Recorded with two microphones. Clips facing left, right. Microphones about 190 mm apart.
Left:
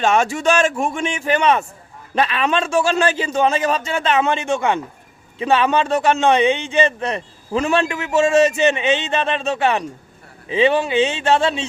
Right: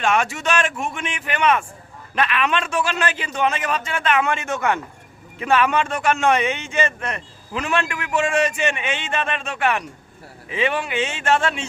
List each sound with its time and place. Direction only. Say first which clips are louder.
0.0 s a man's voice: left 4 dB; 30° left (ahead or behind)
6.8 s a man's voice: left 5 dB; 30° left (ahead or behind)